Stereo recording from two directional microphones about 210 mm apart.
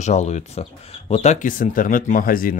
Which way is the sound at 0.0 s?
35° left (ahead or behind).